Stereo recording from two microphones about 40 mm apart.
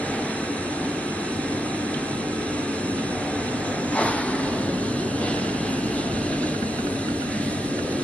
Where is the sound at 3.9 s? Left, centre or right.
Left.